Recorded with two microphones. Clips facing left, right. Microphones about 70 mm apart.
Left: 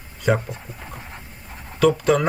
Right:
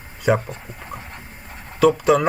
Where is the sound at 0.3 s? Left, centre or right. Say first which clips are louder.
Right 2 dB; centre.